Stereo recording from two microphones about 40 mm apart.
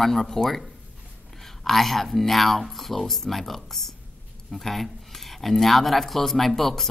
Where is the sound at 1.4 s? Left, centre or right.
Centre.